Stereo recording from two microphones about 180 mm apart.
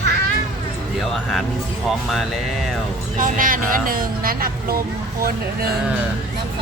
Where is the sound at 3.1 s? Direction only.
50° right (ahead or behind).